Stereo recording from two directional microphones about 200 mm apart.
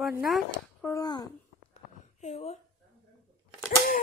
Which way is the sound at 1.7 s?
35° left (ahead or behind).